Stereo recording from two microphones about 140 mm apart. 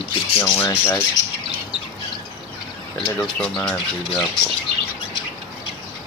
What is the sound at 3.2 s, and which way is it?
Speech, 5° left (ahead or behind).